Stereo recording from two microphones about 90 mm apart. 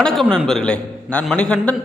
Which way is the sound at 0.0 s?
5° left (ahead or behind).